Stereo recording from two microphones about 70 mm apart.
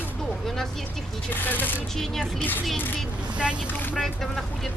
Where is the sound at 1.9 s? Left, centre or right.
Centre.